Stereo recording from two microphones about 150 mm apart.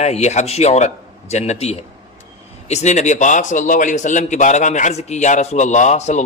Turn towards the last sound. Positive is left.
turn(degrees=50)  # may be behind; listen again after turning